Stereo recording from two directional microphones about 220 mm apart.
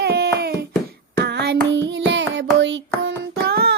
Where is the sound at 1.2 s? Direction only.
50° right (ahead or behind).